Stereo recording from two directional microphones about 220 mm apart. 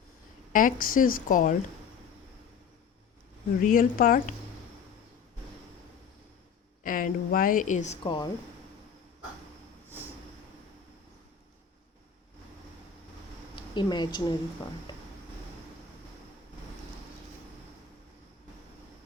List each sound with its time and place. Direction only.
0.5 s speech: 40° left (ahead or behind)
3.6 s speech: 40° left (ahead or behind)
6.8 s speech: 40° left (ahead or behind); by 8.3 s 20° left (ahead or behind)
13.7 s a woman's voice: 20° left (ahead or behind)